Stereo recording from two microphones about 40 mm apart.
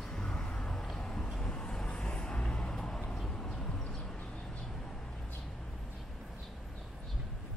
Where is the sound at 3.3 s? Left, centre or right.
Centre.